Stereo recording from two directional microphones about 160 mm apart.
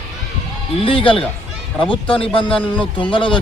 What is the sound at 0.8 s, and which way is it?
Speech, 35° left (ahead or behind).